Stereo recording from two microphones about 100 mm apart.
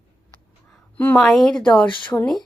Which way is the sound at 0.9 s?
20° left (ahead or behind).